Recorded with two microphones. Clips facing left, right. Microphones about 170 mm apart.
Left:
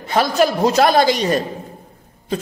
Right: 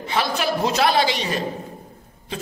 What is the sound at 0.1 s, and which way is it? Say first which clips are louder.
A man's voice: left 7 dB; 45° left (ahead or behind).